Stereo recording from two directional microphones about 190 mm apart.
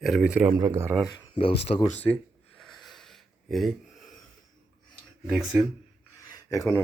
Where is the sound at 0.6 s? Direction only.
15° right (ahead or behind).